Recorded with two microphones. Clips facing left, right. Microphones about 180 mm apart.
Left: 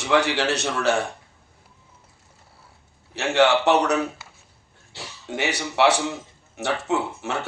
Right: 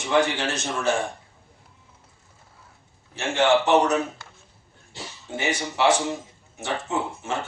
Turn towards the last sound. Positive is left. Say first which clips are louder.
# left 3 dB
turn(degrees=70)  # may be behind; listen again after turning